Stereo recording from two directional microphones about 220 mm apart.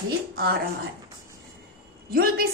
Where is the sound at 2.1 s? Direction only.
40° right (ahead or behind).